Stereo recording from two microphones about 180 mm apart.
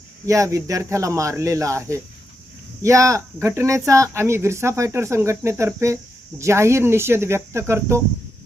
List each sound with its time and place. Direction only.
0.3 s speech: 15° right (ahead or behind)